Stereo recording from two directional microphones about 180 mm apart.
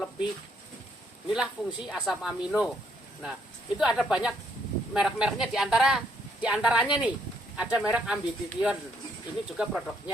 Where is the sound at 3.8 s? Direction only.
5° right (ahead or behind).